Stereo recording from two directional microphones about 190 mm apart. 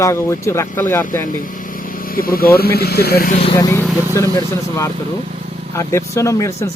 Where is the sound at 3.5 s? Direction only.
20° left (ahead or behind).